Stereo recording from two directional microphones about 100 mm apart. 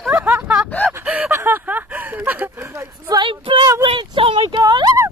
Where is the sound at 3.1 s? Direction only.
55° right (ahead or behind).